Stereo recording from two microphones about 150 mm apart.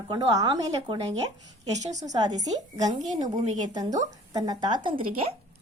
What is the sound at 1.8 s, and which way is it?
Speech, 50° right (ahead or behind).